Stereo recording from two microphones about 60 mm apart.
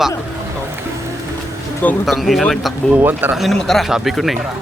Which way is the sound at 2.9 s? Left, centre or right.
Right.